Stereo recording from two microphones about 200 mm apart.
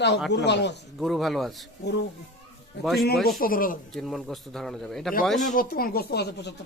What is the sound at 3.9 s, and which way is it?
Speech, centre (ahead or behind).